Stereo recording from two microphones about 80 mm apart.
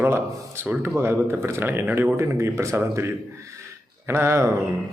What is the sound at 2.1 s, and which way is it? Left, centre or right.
Speech, right.